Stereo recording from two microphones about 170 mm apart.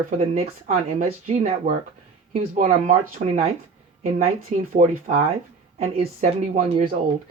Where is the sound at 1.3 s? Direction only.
45° right (ahead or behind).